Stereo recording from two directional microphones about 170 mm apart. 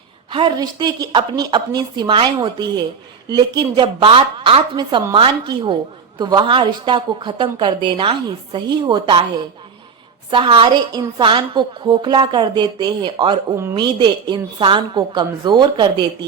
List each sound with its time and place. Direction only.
0.3 s a woman's voice: 30° right (ahead or behind)
10.3 s a woman's voice: 30° right (ahead or behind)